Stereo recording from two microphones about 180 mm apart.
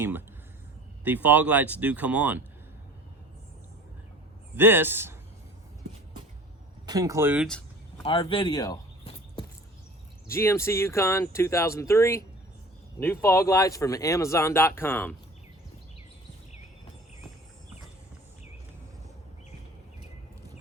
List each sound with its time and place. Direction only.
0.0 s speech: 10° right (ahead or behind)
4.5 s speech: 10° right (ahead or behind)
6.8 s speech: 20° right (ahead or behind)
8.0 s speech: 30° left (ahead or behind)
10.2 s speech: 15° left (ahead or behind)